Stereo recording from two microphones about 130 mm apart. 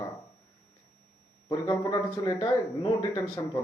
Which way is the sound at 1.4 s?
35° left (ahead or behind).